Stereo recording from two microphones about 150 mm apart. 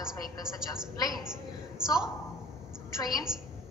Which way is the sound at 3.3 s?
5° right (ahead or behind).